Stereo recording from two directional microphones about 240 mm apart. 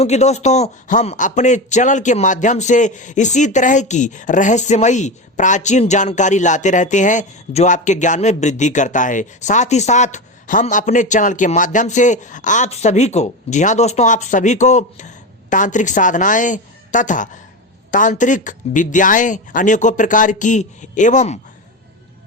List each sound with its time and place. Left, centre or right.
0.0 s a man's voice: left